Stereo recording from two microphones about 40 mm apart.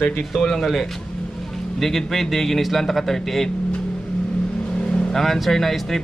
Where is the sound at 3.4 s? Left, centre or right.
Left.